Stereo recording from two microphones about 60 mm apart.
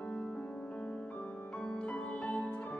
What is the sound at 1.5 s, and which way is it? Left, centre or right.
Music, centre.